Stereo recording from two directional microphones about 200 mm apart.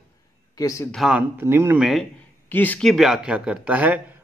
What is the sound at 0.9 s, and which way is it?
A man's voice, 5° right (ahead or behind).